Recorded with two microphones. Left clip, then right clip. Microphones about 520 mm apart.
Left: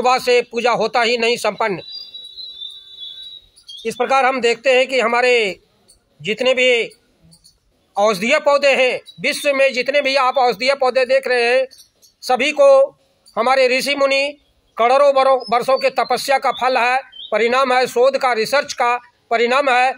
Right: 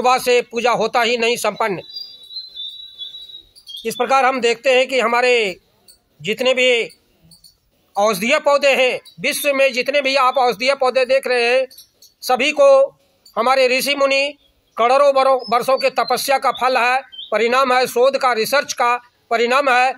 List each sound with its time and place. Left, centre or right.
0.0 s a man's voice: right
3.8 s a man's voice: right
7.9 s a man's voice: right